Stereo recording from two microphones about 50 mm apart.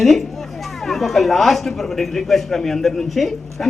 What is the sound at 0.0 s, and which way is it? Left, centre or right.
Speech, centre.